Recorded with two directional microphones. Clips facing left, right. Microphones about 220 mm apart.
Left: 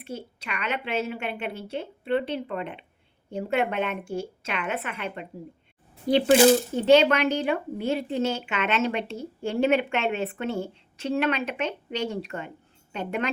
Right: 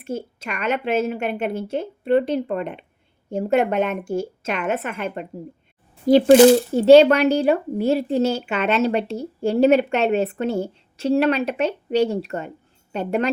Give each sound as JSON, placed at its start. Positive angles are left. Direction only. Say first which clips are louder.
{"t": 0.0, "sound": "a woman's voice", "louder": "right 8 dB", "side_deg": -45}